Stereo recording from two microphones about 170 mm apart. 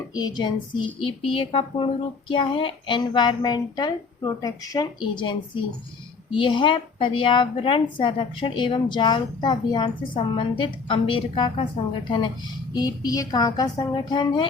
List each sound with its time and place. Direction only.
0.1 s speech: 25° left (ahead or behind)